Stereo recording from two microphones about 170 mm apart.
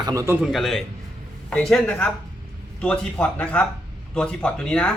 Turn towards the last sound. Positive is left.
turn(degrees=5)  # may be behind; listen again after turning